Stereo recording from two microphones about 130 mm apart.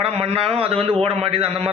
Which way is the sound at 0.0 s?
50° right (ahead or behind).